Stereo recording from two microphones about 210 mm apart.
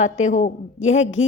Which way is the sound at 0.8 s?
65° left (ahead or behind).